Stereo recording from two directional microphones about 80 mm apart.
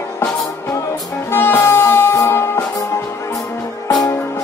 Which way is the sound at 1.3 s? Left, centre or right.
Left.